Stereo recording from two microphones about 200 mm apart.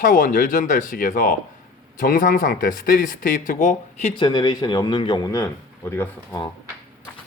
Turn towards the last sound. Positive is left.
turn(degrees=10)  # may be behind; listen again after turning